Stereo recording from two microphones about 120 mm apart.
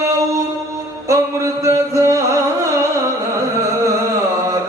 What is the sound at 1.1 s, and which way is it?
Music, 25° right (ahead or behind).